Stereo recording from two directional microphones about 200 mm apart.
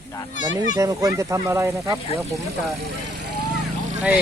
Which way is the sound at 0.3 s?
40° left (ahead or behind).